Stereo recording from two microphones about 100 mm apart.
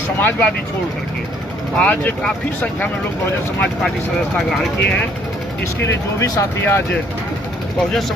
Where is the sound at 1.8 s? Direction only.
15° left (ahead or behind).